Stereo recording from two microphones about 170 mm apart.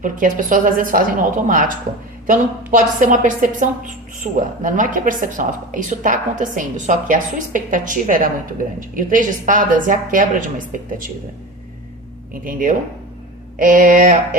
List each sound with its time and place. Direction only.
0.0 s a woman's voice: 50° right (ahead or behind)
12.3 s a woman's voice: 55° right (ahead or behind)